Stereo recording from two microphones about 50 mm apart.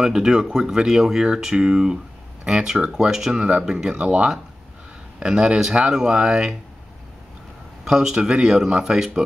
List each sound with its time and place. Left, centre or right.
0.0 s speech: centre
3.4 s speech: right
7.8 s speech: centre